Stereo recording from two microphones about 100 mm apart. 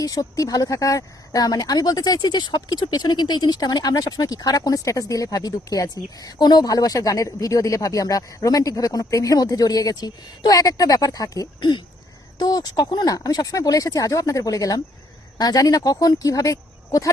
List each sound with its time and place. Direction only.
0.0 s speech: 35° left (ahead or behind)